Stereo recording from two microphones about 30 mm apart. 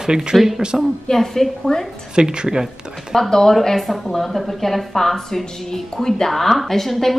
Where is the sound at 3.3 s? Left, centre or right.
Centre.